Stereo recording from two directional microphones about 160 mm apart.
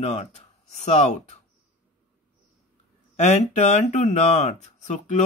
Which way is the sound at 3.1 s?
45° left (ahead or behind).